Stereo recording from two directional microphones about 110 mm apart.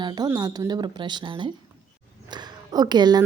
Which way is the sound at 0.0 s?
40° right (ahead or behind).